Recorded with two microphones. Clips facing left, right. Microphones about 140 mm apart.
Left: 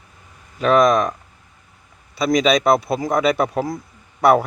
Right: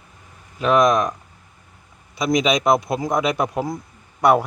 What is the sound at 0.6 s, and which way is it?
Speech, 10° right (ahead or behind).